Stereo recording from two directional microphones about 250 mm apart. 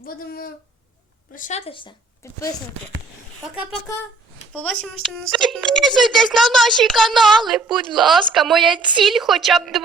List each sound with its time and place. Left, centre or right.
0.0 s a sound: left
1.4 s a woman's voice: left; by 2.4 s centre
5.0 s speech: centre